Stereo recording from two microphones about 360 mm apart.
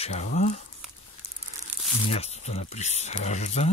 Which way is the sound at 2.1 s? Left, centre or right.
Centre.